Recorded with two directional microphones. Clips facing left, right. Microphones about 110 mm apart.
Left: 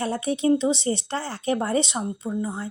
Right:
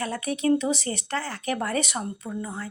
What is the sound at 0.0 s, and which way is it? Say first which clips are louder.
A woman's voice: left 3 dB; 30° left (ahead or behind).